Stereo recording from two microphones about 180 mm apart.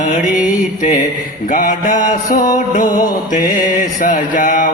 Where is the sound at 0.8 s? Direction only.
45° left (ahead or behind).